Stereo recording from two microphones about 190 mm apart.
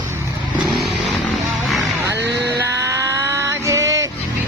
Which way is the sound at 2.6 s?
15° right (ahead or behind).